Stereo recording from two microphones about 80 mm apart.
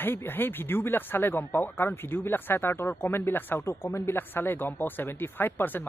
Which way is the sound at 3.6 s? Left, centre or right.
Left.